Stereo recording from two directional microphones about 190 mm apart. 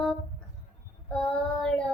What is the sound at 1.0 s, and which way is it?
Child singing, 5° left (ahead or behind).